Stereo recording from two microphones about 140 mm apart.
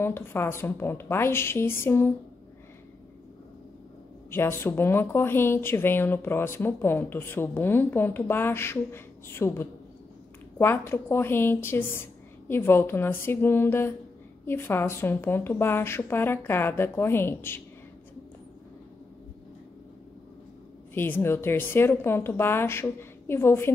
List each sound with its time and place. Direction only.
0.0 s speech: 15° left (ahead or behind)
4.3 s speech: 15° left (ahead or behind)
20.9 s speech: 15° left (ahead or behind)